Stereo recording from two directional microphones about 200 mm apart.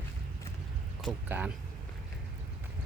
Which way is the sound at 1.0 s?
Centre (ahead or behind).